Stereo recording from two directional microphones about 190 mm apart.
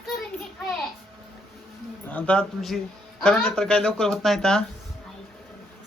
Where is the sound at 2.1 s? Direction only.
5° left (ahead or behind).